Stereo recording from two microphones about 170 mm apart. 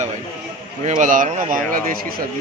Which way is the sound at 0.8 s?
50° right (ahead or behind).